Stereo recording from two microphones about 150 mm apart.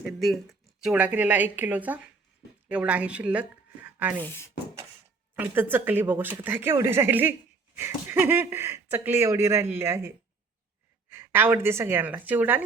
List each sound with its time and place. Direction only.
0.0 s speech: centre (ahead or behind)
4.2 s speech: 15° left (ahead or behind)
5.4 s speech: 15° right (ahead or behind)
11.1 s speech: 15° right (ahead or behind)